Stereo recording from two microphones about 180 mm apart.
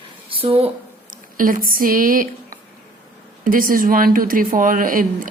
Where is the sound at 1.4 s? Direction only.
50° right (ahead or behind).